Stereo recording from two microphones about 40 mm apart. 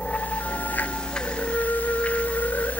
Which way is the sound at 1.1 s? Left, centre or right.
Left.